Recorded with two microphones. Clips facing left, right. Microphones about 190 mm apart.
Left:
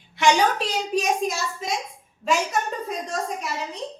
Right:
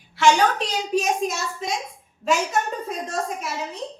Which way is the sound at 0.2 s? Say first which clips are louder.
Right 1 dB; 15° left (ahead or behind).